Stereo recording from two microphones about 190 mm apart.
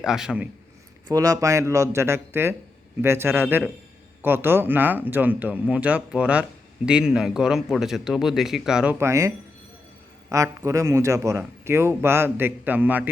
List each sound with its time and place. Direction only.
0.0 s speech: 5° right (ahead or behind)
1.0 s speech: 20° right (ahead or behind)